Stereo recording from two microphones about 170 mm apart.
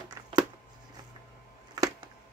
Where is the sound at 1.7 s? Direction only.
25° right (ahead or behind).